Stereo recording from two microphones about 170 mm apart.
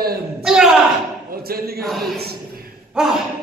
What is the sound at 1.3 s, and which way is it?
A man's voice, 60° right (ahead or behind).